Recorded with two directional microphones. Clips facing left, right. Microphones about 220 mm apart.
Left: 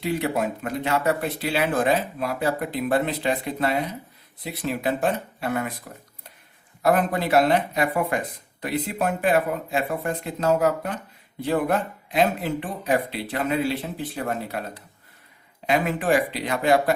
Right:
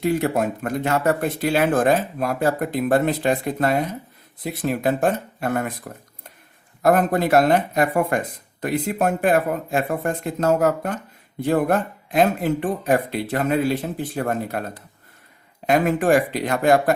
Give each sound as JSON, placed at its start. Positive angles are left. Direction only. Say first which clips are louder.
{"t": 0.0, "sound": "speech", "louder": "right 4 dB", "side_deg": -45}
{"t": 6.8, "sound": "speech", "louder": "right 4 dB", "side_deg": -45}